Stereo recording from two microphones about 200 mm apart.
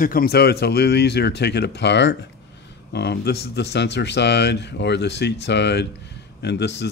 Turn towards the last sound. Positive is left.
turn(degrees=60)  # may be behind; listen again after turning